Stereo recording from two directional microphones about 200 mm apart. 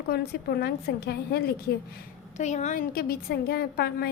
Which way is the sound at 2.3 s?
35° left (ahead or behind).